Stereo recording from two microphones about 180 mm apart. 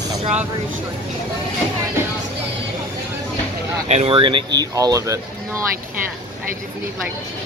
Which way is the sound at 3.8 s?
35° right (ahead or behind).